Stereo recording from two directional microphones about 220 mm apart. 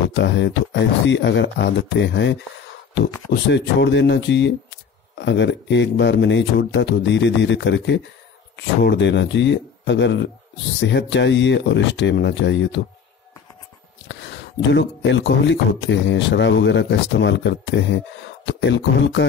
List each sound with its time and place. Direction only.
0.1 s speech: 55° left (ahead or behind)
14.7 s speech: 55° left (ahead or behind)